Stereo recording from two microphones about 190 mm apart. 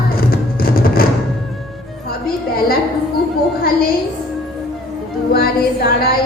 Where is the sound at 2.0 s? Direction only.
50° left (ahead or behind).